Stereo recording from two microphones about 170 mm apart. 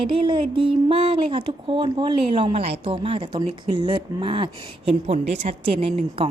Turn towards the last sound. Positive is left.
turn(degrees=-35)  # may be behind; listen again after turning